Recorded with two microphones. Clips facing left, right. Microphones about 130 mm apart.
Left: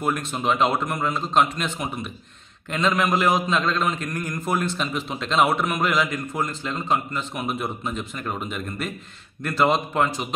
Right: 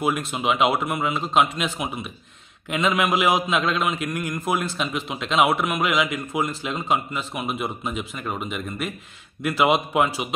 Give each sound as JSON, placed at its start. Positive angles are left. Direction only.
{"t": 0.0, "sound": "a man's voice", "side_deg": -5}
{"t": 7.3, "sound": "a man's voice", "side_deg": 0}